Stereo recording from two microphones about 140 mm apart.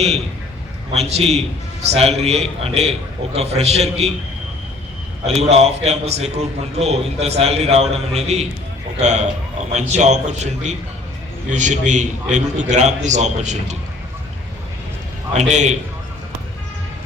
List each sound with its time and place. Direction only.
0.9 s a man's voice: 50° right (ahead or behind)
5.2 s a man's voice: 50° right (ahead or behind)
15.4 s a man's voice: 55° right (ahead or behind)